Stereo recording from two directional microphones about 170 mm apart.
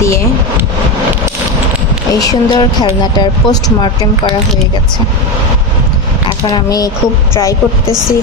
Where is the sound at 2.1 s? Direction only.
20° left (ahead or behind).